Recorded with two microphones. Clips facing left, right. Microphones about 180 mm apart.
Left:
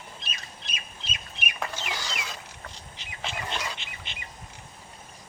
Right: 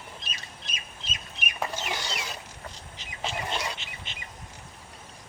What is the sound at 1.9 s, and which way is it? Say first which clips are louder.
Mechanisms: right 2 dB; 30° right (ahead or behind).